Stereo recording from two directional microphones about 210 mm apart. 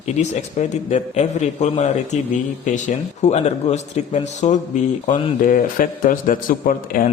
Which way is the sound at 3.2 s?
35° left (ahead or behind).